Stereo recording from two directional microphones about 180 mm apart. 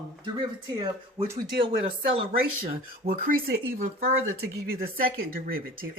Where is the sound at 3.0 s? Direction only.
50° right (ahead or behind).